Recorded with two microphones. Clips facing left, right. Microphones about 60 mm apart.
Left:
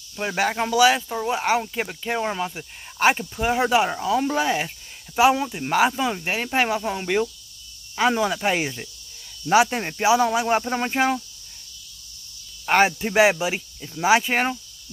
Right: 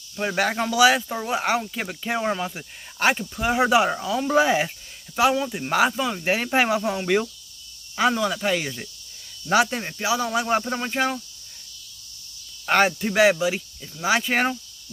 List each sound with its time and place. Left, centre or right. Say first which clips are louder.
0.1 s speech: even; centre
1.6 s speech: left 3 dB; centre
1.9 s speech: right 1 dB; centre
4.3 s speech: right 3 dB; centre
5.1 s speech: left 2 dB; centre
6.2 s speech: right 5 dB; centre
8.1 s speech: left 1 dB; centre
9.5 s speech: left 2 dB; centre
9.8 s speech: left 6 dB; left
10.3 s speech: left 1 dB; centre
12.6 s speech: left 1 dB; centre